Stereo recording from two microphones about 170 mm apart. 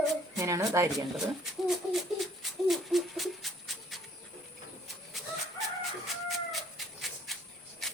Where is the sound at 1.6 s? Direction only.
Centre (ahead or behind).